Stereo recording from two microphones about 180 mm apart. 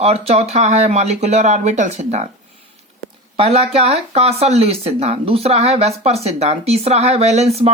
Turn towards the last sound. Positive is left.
turn(degrees=-35)  # may be behind; listen again after turning